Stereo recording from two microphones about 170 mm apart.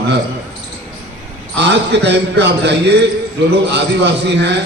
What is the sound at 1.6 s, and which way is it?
A man's voice, 90° right.